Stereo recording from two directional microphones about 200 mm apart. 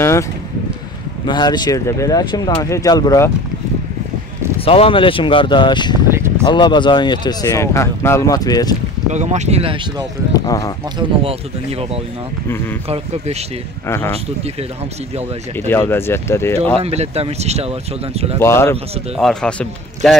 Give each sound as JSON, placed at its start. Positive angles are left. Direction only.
{"t": 1.2, "sound": "speech", "side_deg": 20}
{"t": 4.6, "sound": "speech", "side_deg": 30}
{"t": 6.0, "sound": "a sound", "side_deg": -10}
{"t": 6.4, "sound": "speech", "side_deg": 20}
{"t": 9.1, "sound": "speech", "side_deg": -35}
{"t": 10.3, "sound": "a sound", "side_deg": 15}
{"t": 12.8, "sound": "speech", "side_deg": -30}
{"t": 13.8, "sound": "speech", "side_deg": 10}
{"t": 15.7, "sound": "speech", "side_deg": 10}
{"t": 16.8, "sound": "speech", "side_deg": -30}
{"t": 18.4, "sound": "speech", "side_deg": 10}